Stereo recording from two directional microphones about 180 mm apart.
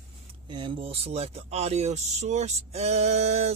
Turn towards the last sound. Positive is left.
turn(degrees=-35)  # may be behind; listen again after turning